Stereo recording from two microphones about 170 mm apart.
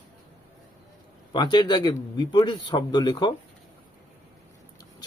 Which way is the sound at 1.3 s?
25° left (ahead or behind).